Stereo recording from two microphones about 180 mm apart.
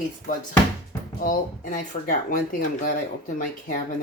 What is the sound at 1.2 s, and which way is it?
Speech, 50° left (ahead or behind).